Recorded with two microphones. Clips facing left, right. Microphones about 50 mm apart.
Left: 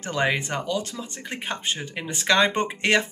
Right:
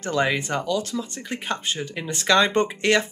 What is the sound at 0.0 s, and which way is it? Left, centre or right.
Speech, centre.